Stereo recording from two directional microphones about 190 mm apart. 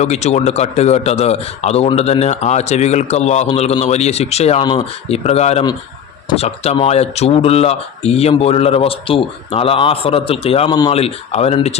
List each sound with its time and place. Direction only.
0.0 s a man's voice: 35° left (ahead or behind)